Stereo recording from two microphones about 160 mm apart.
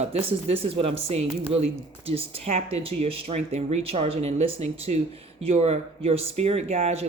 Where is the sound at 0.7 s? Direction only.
35° right (ahead or behind).